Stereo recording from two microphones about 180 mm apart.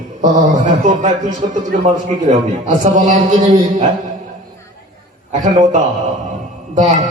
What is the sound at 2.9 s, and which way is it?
Speech, 45° right (ahead or behind).